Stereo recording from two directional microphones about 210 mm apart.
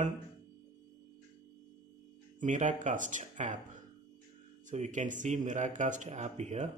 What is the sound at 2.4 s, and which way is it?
Speech, 35° right (ahead or behind).